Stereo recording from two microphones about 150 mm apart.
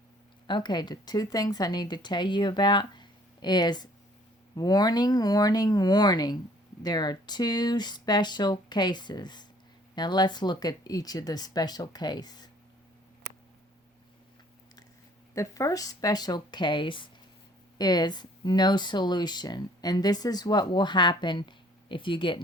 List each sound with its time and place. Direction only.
0.4 s speech: 30° left (ahead or behind)
15.4 s speech: 20° left (ahead or behind)